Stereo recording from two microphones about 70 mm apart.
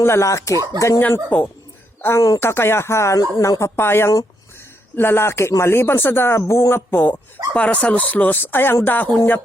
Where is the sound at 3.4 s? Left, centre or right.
Left.